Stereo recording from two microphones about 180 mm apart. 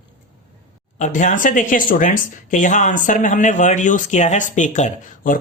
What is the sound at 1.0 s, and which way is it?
Speech, 40° left (ahead or behind).